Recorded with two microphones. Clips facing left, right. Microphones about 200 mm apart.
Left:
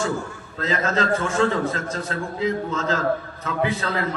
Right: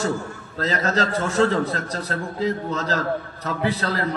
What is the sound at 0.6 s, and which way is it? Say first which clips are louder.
A man's voice: even; 40° right (ahead or behind).